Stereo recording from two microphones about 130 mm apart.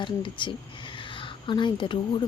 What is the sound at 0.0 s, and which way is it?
A woman's voice, 40° left (ahead or behind).